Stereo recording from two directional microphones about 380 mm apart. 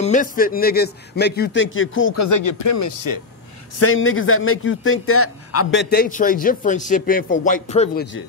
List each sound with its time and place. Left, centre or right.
0.0 s a man's voice: centre
2.2 s speech: left
3.8 s a man's voice: left